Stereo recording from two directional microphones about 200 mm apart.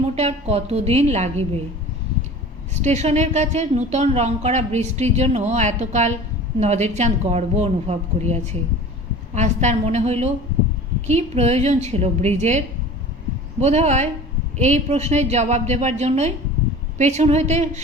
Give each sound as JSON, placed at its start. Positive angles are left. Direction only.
{"t": 0.0, "sound": "a woman's voice", "side_deg": -30}
{"t": 2.8, "sound": "a woman's voice", "side_deg": -35}